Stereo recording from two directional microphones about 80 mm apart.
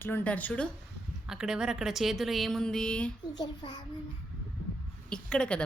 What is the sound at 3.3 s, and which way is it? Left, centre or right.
Speech, left.